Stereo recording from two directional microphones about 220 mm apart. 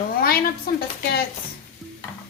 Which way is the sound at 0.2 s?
45° left (ahead or behind).